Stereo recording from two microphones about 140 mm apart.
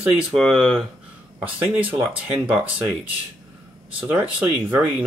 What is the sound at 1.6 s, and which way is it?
Speech, 10° right (ahead or behind).